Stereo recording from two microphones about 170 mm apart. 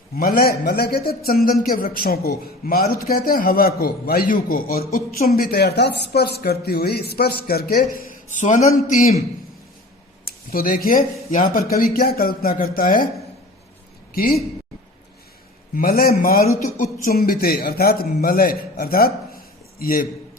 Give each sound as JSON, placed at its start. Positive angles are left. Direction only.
{"t": 0.2, "sound": "a man's voice", "side_deg": 60}
{"t": 10.2, "sound": "a man's voice", "side_deg": 60}
{"t": 14.1, "sound": "a woman's voice", "side_deg": 60}
{"t": 15.7, "sound": "a man's voice", "side_deg": 60}